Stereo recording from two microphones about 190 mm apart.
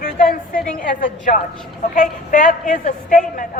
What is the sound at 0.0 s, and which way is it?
A woman's voice, 45° left (ahead or behind).